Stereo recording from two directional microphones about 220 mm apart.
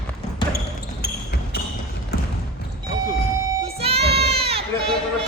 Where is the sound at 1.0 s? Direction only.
45° left (ahead or behind).